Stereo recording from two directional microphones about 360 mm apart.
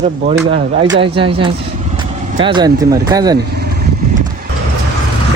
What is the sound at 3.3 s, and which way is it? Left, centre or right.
Vehicle, right.